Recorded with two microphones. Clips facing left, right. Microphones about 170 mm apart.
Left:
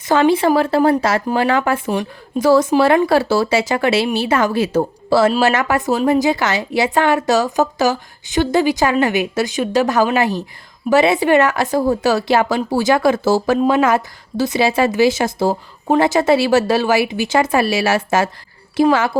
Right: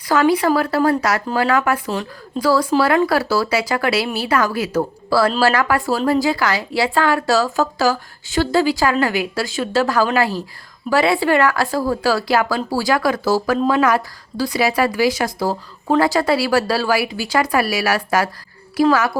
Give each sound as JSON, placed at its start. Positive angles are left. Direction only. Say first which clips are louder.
{"t": 0.1, "sound": "a woman's voice", "louder": "left 2 dB", "side_deg": 25}
{"t": 1.9, "sound": "a woman's voice", "louder": "left 4 dB", "side_deg": 15}